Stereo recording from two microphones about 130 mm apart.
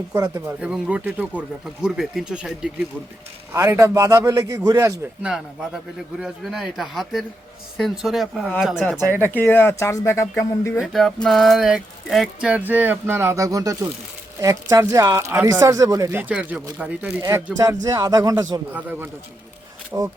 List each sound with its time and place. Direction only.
0.1 s speech: 20° right (ahead or behind)
0.6 s speech: 10° right (ahead or behind)
3.5 s speech: 25° right (ahead or behind)
5.2 s speech: 5° right (ahead or behind)
9.2 s speech: 15° left (ahead or behind)
10.8 s speech: centre (ahead or behind); by 16.0 s 25° right (ahead or behind)
16.1 s speech: 10° right (ahead or behind)
17.2 s speech: 25° right (ahead or behind)
18.7 s speech: 15° right (ahead or behind)